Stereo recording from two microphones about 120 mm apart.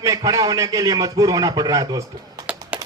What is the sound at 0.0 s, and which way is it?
A man's voice, 30° right (ahead or behind).